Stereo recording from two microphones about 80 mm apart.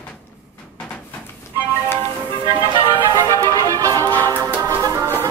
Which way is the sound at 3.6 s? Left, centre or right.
Right.